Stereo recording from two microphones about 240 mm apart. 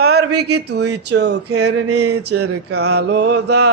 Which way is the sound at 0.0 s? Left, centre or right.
Right.